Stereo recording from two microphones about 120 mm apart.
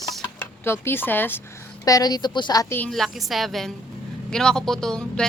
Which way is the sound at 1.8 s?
30° left (ahead or behind).